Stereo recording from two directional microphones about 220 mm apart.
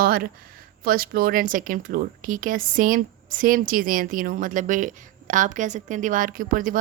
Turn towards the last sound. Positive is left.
turn(degrees=-40)  # may be behind; listen again after turning